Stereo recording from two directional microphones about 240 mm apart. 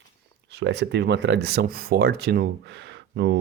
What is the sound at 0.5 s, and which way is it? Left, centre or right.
Speech, right.